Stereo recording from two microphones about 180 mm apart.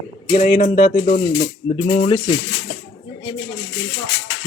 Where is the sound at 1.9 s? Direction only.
30° left (ahead or behind).